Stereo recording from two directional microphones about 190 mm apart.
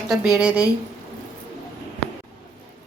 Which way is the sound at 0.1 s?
5° right (ahead or behind).